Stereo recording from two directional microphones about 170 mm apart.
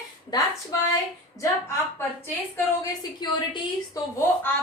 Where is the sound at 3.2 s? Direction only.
25° left (ahead or behind).